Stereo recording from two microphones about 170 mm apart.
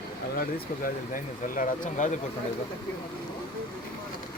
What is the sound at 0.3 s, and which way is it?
Speech, 55° left (ahead or behind).